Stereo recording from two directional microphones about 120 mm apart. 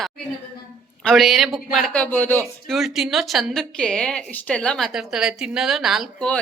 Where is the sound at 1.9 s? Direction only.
10° left (ahead or behind).